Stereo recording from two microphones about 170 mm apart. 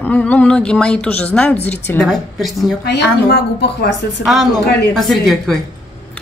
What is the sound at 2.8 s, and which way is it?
A woman's voice, 75° left (ahead or behind).